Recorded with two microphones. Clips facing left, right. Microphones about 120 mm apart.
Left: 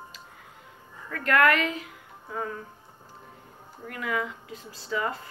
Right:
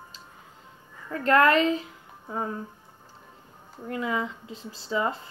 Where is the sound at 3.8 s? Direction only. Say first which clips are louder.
Right 2 dB; 25° right (ahead or behind).